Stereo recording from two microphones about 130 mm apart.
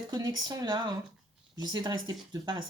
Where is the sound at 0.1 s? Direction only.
30° right (ahead or behind).